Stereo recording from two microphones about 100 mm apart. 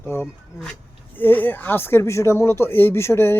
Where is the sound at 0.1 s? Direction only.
30° left (ahead or behind).